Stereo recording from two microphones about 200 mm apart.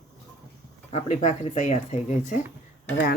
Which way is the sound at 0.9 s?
35° left (ahead or behind).